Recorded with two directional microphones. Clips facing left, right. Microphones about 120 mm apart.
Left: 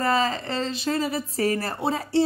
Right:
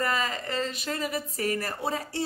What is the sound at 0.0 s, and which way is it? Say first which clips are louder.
A woman's voice: left 6 dB; 30° left (ahead or behind).